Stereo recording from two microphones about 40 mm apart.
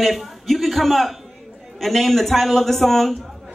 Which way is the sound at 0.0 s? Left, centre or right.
Centre.